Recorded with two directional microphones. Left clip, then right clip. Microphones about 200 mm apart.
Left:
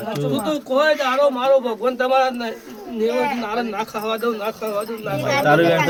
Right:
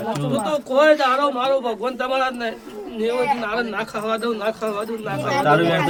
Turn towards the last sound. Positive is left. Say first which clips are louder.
# left 2 dB
turn(degrees=50)  # may be behind; listen again after turning